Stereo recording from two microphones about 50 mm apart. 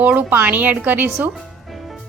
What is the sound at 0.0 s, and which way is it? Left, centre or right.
A woman's voice, right.